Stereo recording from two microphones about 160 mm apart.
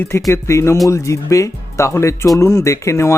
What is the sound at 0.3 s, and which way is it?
Speech, 20° left (ahead or behind).